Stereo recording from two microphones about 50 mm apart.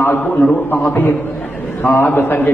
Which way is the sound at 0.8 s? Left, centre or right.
Left.